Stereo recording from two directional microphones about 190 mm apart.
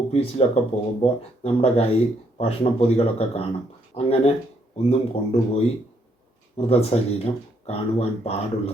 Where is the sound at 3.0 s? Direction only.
35° left (ahead or behind).